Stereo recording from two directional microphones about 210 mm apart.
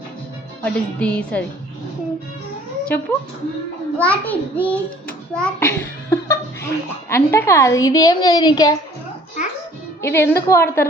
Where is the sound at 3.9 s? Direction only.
5° left (ahead or behind).